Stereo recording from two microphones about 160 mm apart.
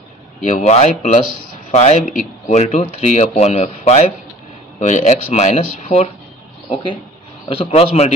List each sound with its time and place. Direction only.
0.4 s speech: 50° left (ahead or behind)
6.7 s a man's voice: 30° left (ahead or behind)